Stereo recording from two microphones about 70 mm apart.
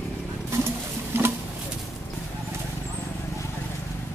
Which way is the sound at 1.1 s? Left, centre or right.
Right.